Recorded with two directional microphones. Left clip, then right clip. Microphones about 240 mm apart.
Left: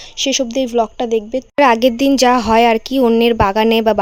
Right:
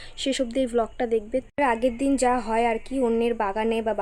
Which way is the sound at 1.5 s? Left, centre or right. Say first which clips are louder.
Left 13 dB; left.